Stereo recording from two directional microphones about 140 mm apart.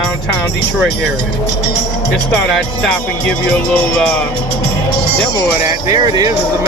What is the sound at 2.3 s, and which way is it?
Speech, 5° left (ahead or behind).